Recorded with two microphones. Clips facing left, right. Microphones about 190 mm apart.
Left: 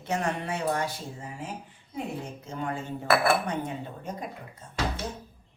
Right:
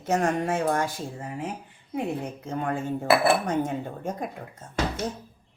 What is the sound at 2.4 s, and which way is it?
Speech, 55° right (ahead or behind).